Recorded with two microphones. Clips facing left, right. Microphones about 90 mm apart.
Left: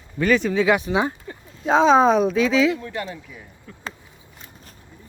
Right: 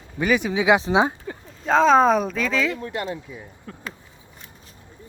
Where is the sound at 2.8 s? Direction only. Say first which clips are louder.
Right 2 dB; 25° right (ahead or behind).